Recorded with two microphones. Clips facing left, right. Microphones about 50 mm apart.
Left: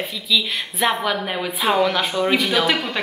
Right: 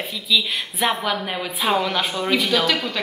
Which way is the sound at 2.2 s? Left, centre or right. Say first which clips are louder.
Left 1 dB; centre.